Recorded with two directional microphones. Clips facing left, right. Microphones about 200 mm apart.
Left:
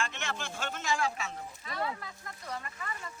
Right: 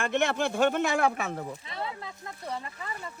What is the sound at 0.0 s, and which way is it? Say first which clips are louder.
Speech: right 11 dB; 60° right (ahead or behind).